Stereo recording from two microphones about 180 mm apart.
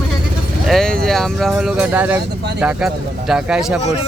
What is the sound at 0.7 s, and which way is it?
Speech, 5° left (ahead or behind).